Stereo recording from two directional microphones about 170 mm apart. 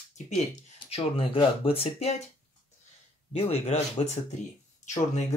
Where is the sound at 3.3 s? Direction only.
40° left (ahead or behind).